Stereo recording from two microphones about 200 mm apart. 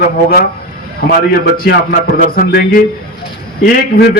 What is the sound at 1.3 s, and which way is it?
A man's voice, 50° left (ahead or behind).